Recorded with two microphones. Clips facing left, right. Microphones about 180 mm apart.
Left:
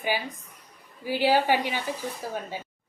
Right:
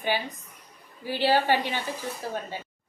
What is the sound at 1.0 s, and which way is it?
Speech, 10° left (ahead or behind).